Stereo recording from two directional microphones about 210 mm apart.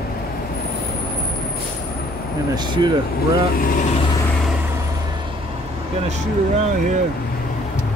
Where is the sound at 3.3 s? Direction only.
45° left (ahead or behind).